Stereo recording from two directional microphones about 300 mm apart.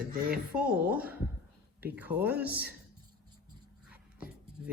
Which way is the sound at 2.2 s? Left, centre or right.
Centre.